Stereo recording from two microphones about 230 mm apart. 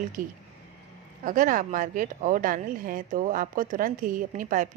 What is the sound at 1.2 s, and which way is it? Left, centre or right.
Speech, right.